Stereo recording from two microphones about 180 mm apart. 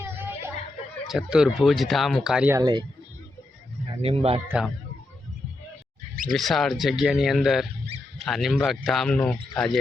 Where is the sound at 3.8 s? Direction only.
30° right (ahead or behind).